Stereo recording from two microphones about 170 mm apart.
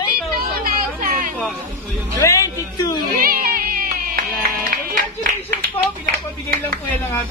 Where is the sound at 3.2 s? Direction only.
60° right (ahead or behind).